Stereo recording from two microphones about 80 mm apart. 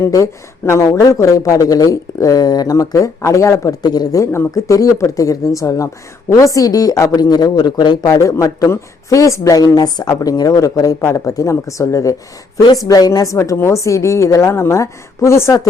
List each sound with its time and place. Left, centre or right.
0.6 s speech: left
2.7 s a woman's voice: left
3.8 s speech: left
4.2 s speech: left
8.0 s a woman's voice: left